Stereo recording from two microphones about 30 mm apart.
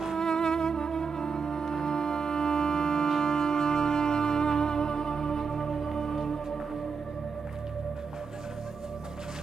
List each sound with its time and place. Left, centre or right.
0.2 s music: left